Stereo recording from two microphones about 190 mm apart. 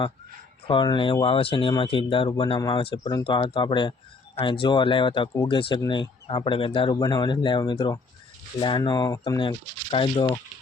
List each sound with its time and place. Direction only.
0.7 s speech: 25° left (ahead or behind)